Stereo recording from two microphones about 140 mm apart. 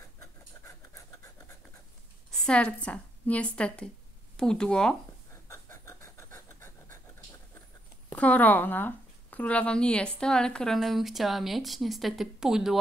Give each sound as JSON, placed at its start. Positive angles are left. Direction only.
{"t": 2.3, "sound": "speech", "side_deg": 5}
{"t": 5.3, "sound": "pant", "side_deg": 20}
{"t": 8.1, "sound": "speech", "side_deg": 10}